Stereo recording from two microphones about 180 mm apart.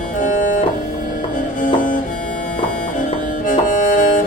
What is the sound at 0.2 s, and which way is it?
Music, 45° left (ahead or behind).